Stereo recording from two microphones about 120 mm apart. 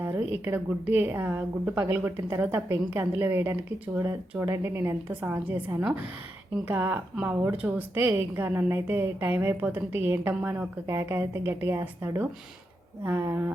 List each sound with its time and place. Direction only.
0.0 s a woman's voice: 15° right (ahead or behind)